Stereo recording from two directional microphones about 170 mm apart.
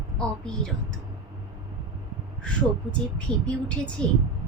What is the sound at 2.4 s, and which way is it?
Speech, 5° left (ahead or behind).